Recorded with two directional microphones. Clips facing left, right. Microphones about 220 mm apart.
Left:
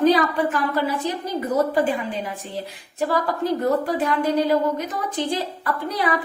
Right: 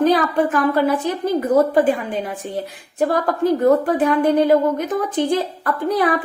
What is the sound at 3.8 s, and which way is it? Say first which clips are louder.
A woman's voice: right 5 dB; 55° right (ahead or behind).